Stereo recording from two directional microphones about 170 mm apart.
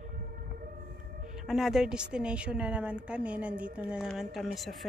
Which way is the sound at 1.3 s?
Centre (ahead or behind).